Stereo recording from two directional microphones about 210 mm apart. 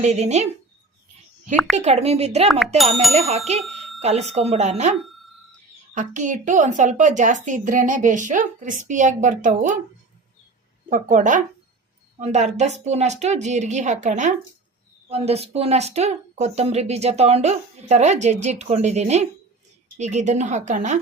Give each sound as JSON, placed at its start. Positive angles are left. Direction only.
{"t": 0.0, "sound": "speech", "side_deg": -35}
{"t": 1.7, "sound": "speech", "side_deg": -30}
{"t": 3.6, "sound": "a sound", "side_deg": 0}
{"t": 4.0, "sound": "speech", "side_deg": -30}
{"t": 10.8, "sound": "speech", "side_deg": -40}